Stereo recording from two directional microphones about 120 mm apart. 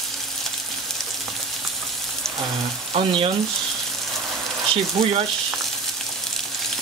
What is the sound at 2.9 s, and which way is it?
Speech, 50° right (ahead or behind).